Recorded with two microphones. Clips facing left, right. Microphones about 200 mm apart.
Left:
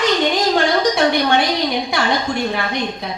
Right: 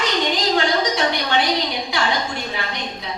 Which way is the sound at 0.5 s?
50° left (ahead or behind).